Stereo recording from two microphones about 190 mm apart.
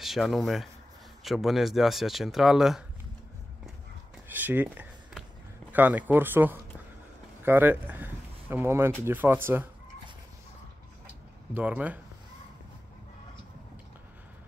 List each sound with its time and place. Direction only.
0.0 s speech: centre (ahead or behind)
4.3 s a sound: 10° right (ahead or behind)
5.7 s speech: 10° right (ahead or behind)
11.5 s speech: 10° right (ahead or behind)